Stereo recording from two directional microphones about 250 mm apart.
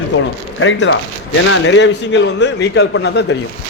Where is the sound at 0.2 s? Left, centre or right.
Left.